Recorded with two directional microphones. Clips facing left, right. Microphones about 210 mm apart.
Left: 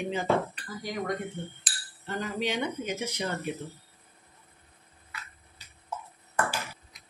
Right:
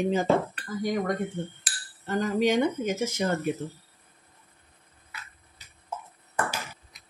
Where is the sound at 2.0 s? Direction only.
45° right (ahead or behind).